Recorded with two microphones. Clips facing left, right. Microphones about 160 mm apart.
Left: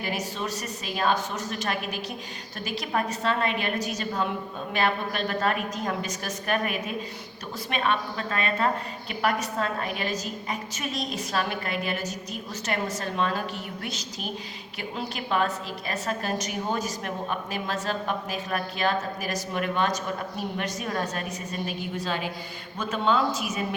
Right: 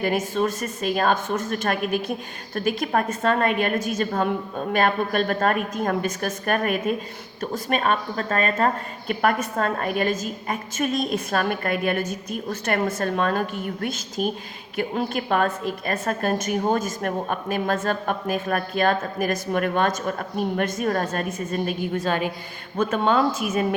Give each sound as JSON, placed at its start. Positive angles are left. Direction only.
{"t": 0.0, "sound": "a woman's voice", "side_deg": -50}